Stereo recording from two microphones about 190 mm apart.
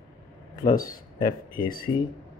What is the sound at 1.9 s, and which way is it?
Speech, 25° left (ahead or behind).